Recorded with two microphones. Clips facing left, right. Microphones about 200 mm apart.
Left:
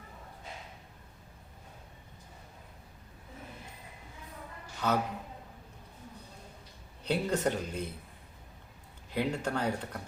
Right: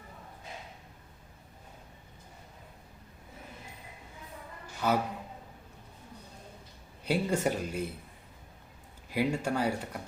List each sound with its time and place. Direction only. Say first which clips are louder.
4.8 s speech: right 2 dB; 10° right (ahead or behind)
7.0 s speech: right 1 dB; 10° right (ahead or behind)
9.1 s speech: right 2 dB; 10° right (ahead or behind)